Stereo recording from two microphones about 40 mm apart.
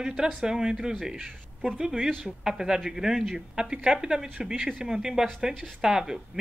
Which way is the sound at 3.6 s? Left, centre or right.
Right.